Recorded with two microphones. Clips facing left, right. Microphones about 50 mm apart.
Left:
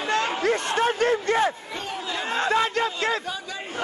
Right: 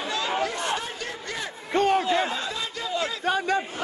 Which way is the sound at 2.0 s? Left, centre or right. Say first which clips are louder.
Right 6 dB; right.